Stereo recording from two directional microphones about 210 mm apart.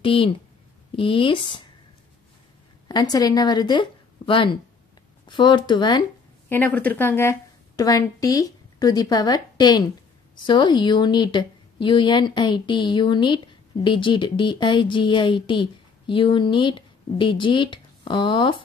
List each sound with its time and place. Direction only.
0.0 s a woman's voice: 25° left (ahead or behind)
2.9 s a woman's voice: 20° left (ahead or behind)
6.5 s a woman's voice: 5° left (ahead or behind); by 18.6 s 25° left (ahead or behind)